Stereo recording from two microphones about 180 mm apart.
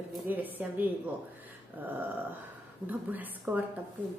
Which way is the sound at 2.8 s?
10° right (ahead or behind).